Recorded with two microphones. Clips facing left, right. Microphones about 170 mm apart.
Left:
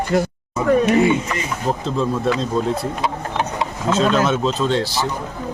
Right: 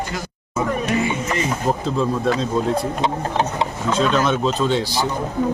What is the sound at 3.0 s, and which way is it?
Speech, 25° right (ahead or behind).